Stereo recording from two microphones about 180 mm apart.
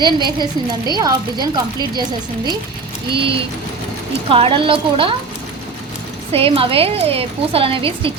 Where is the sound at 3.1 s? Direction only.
30° right (ahead or behind).